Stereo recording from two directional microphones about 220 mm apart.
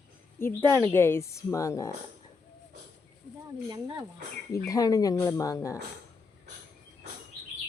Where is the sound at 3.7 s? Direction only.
20° right (ahead or behind).